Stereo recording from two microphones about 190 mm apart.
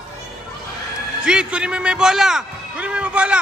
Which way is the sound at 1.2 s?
5° right (ahead or behind).